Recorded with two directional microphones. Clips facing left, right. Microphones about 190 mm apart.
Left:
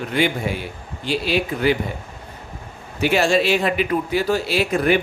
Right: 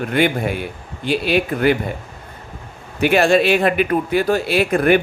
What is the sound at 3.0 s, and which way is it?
A man's voice, 55° right (ahead or behind).